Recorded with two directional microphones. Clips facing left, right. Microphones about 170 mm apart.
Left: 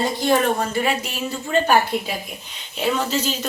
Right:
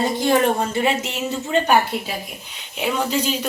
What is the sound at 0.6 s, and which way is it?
A woman's voice, 25° right (ahead or behind).